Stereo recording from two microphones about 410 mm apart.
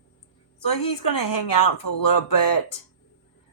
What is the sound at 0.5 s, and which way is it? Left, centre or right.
Speech, left.